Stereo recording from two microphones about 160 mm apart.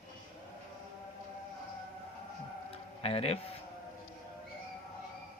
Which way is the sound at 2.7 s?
40° left (ahead or behind).